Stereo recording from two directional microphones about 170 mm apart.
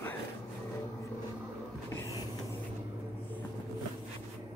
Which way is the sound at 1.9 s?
15° left (ahead or behind).